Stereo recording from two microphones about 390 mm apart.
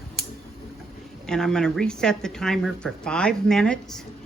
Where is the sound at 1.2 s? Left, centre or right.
Centre.